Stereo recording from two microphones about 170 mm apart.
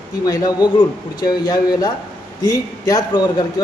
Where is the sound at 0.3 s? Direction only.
20° left (ahead or behind).